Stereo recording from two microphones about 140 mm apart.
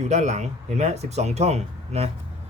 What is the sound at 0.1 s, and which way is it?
Speech, 55° right (ahead or behind).